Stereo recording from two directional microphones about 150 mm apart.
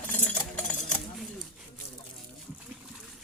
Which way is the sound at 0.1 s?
10° left (ahead or behind).